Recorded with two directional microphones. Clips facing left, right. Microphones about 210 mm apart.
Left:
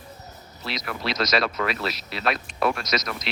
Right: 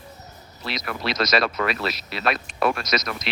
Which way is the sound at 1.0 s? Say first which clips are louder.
Right 2 dB; 60° right (ahead or behind).